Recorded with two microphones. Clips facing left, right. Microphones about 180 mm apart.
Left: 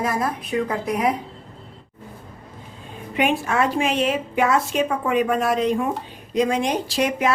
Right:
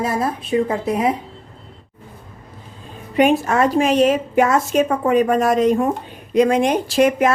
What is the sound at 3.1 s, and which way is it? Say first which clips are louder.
A woman's voice: right 6 dB; 40° right (ahead or behind).